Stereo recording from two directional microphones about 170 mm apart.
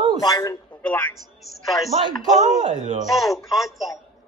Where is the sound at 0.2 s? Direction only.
20° left (ahead or behind).